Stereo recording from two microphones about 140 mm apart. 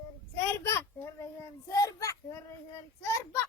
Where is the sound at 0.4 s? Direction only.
20° left (ahead or behind).